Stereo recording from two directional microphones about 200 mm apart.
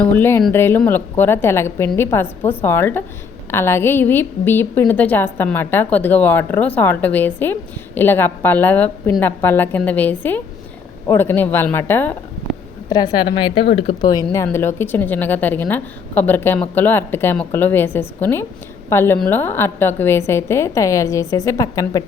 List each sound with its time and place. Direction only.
0.0 s a woman's voice: 10° left (ahead or behind)